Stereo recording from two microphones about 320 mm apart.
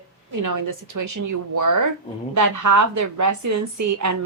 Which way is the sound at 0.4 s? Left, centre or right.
Right.